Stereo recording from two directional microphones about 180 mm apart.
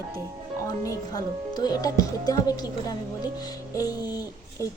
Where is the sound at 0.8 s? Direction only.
20° left (ahead or behind).